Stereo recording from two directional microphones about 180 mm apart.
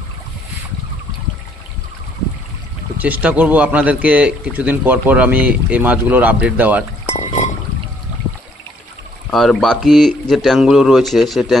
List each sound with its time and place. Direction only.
3.0 s a man's voice: 10° right (ahead or behind)
7.2 s pour: 40° left (ahead or behind)
9.3 s speech: centre (ahead or behind)